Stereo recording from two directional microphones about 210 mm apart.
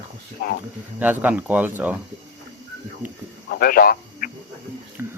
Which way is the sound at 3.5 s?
45° left (ahead or behind).